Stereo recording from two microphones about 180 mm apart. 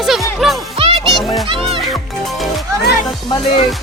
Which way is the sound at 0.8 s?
30° right (ahead or behind).